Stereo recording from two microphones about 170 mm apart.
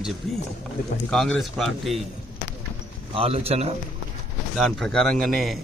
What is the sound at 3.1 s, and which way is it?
Speech, 35° right (ahead or behind).